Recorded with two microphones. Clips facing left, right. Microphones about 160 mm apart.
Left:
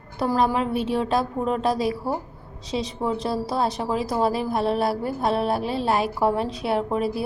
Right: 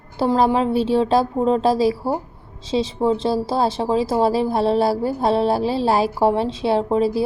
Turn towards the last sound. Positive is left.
turn(degrees=-30)  # may be behind; listen again after turning